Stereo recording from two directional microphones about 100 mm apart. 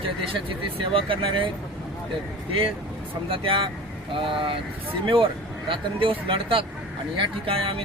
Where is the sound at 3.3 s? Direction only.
65° right (ahead or behind).